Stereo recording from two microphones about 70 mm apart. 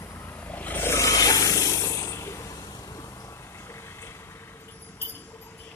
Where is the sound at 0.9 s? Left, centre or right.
Left.